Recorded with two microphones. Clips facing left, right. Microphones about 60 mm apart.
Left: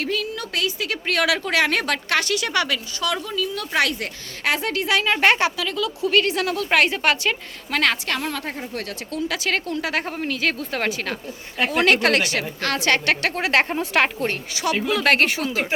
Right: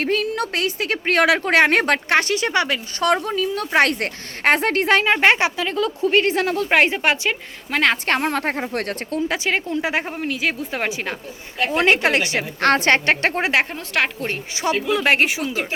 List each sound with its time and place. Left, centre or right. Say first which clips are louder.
0.0 s a woman's voice: right 5 dB; right
3.0 s a woman's voice: right 7 dB; right
5.1 s a woman's voice: right 2 dB; right
8.0 s speech: right 6 dB; right
9.0 s a woman's voice: right 3 dB; right
9.5 s a woman's voice: right 1 dB; centre
12.5 s a woman's voice: right 6 dB; right
13.9 s speech: left 1 dB; centre
14.5 s a woman's voice: right 4 dB; right
14.8 s a woman's voice: even; centre